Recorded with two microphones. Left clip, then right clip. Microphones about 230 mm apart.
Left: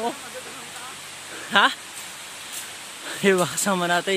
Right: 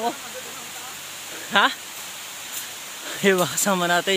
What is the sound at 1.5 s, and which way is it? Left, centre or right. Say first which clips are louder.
Speech: left 1 dB; centre.